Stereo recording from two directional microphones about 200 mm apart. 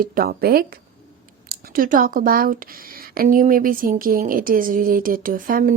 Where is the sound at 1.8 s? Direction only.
45° right (ahead or behind).